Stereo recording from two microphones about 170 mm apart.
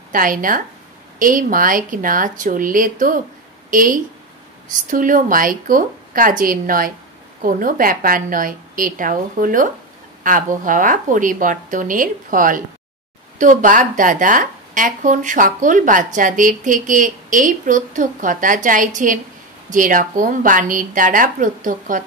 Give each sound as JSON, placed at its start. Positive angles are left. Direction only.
{"t": 0.1, "sound": "a woman's voice", "side_deg": -55}